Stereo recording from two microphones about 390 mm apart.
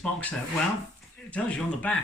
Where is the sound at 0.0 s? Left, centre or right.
Centre.